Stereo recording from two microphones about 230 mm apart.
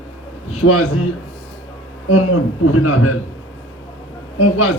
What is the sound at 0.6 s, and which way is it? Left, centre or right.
Speech, left.